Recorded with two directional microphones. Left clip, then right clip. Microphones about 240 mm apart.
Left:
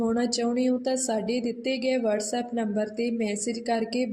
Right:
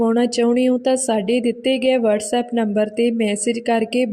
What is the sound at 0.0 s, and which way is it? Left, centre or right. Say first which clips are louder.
A woman's voice: right 9 dB; right.